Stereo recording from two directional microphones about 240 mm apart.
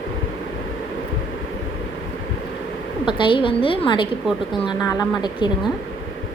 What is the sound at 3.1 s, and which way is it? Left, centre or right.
A woman's voice, left.